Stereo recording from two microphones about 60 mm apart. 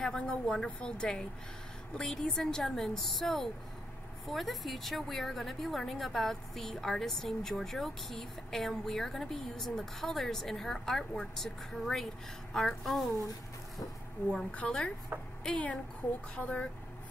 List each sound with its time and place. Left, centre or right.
0.0 s a woman's voice: centre
2.2 s a woman's voice: centre
14.3 s a woman's voice: left
15.1 s speech: right
15.5 s a woman's voice: centre
16.0 s speech: left
16.3 s a woman's voice: left